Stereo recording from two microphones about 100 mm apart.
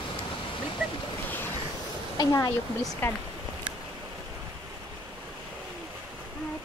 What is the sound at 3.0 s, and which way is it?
Speech, 20° left (ahead or behind).